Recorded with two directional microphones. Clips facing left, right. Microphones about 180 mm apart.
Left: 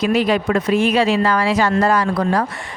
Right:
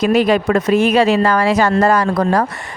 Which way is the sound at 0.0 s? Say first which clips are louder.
Right 3 dB; 45° right (ahead or behind).